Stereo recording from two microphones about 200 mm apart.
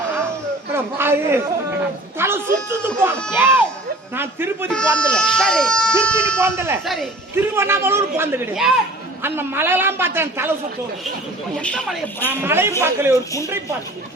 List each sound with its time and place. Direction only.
0.7 s a man's voice: 10° right (ahead or behind)
4.7 s speech: 5° left (ahead or behind)
6.4 s a man's voice: 10° right (ahead or behind)
6.8 s speech: centre (ahead or behind)
7.3 s a man's voice: 10° right (ahead or behind)
11.6 s speech: 5° left (ahead or behind)
12.3 s a man's voice: 10° right (ahead or behind)
13.1 s a man's voice: 15° left (ahead or behind)